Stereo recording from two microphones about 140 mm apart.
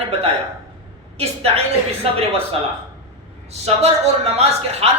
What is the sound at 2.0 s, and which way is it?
Speech, 45° right (ahead or behind).